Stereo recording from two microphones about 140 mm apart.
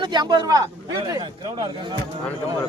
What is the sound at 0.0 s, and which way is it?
A man's voice, 30° right (ahead or behind).